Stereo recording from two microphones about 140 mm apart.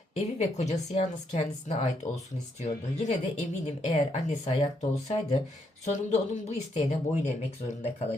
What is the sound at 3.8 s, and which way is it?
Speech, 50° left (ahead or behind).